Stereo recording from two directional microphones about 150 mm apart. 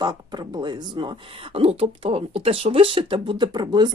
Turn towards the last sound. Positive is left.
turn(degrees=-30)  # may be behind; listen again after turning